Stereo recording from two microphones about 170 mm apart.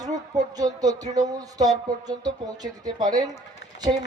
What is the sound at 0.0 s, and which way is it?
Speech, 20° right (ahead or behind).